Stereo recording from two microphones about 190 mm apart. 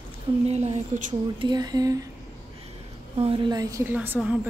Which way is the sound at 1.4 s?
20° right (ahead or behind).